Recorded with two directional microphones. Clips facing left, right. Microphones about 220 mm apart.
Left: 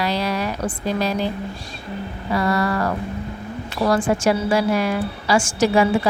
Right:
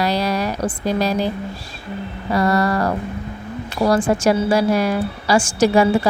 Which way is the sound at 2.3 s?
40° right (ahead or behind).